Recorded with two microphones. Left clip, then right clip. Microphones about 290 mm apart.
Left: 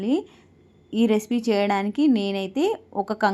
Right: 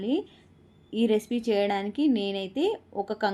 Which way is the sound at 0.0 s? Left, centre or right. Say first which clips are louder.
Left 4 dB; centre.